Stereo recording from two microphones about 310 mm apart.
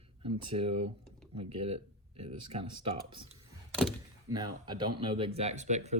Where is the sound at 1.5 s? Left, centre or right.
Centre.